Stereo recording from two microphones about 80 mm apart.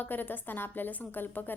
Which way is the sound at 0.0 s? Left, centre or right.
Left.